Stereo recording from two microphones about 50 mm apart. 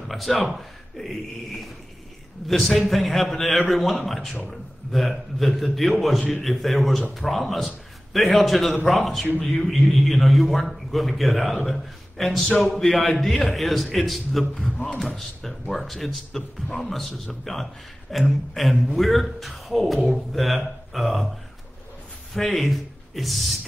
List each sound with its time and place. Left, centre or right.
0.1 s a man's voice: centre
14.7 s speech: left
15.0 s a man's voice: centre
22.3 s speech: centre